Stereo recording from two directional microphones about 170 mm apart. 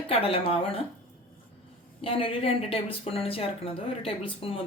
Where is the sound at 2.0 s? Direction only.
30° left (ahead or behind).